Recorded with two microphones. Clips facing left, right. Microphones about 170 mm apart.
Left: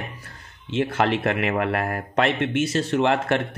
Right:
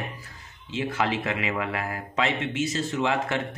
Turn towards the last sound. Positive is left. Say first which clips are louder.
# left 5 dB
turn(degrees=60)  # may be behind; listen again after turning